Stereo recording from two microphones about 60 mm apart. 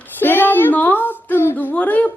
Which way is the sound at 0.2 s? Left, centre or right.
Left.